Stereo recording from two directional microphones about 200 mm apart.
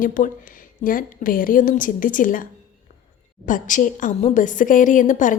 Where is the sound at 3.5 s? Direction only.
40° left (ahead or behind).